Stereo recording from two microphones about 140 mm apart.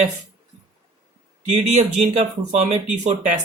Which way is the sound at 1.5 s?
55° right (ahead or behind).